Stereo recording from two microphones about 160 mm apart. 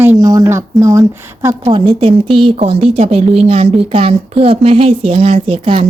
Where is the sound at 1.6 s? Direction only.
30° right (ahead or behind).